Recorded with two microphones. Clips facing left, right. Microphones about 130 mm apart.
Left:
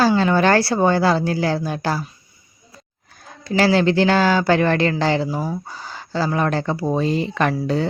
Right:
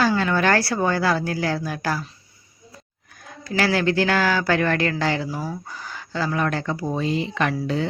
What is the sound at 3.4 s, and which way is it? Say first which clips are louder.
Speech: left 5 dB; 25° left (ahead or behind).